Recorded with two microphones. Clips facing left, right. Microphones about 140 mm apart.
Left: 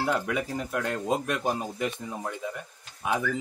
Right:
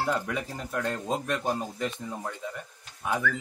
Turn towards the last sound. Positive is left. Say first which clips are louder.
# left 1 dB
turn(degrees=20)  # may be behind; listen again after turning